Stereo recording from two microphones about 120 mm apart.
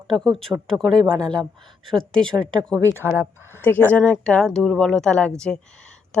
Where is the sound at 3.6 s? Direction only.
15° left (ahead or behind).